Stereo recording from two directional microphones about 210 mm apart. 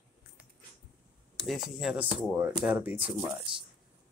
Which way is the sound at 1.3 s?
Centre (ahead or behind).